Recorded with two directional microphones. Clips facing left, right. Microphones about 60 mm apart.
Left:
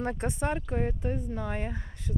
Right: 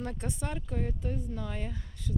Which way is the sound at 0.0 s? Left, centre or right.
Left.